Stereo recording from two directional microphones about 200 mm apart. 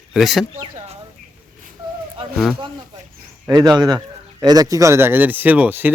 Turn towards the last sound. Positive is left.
turn(degrees=-10)  # may be behind; listen again after turning